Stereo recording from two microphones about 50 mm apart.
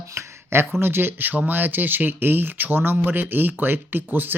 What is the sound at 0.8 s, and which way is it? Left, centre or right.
Speech, right.